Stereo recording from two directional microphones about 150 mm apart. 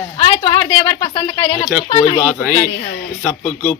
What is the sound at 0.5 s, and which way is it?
Speech, 25° left (ahead or behind).